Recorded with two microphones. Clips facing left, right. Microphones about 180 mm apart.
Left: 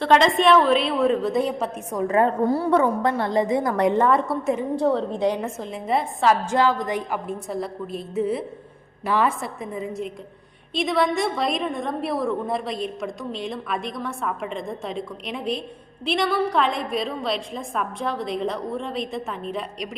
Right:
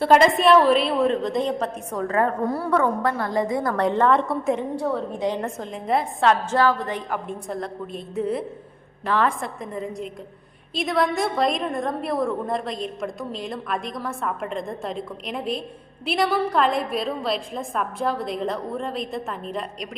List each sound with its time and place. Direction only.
0.0 s a woman's voice: 5° right (ahead or behind); by 4.1 s 15° left (ahead or behind)
4.1 s a woman's voice: centre (ahead or behind)
6.5 s a woman's voice: 15° left (ahead or behind)